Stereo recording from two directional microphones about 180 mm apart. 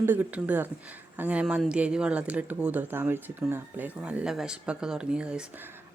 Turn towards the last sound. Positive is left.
turn(degrees=-5)  # may be behind; listen again after turning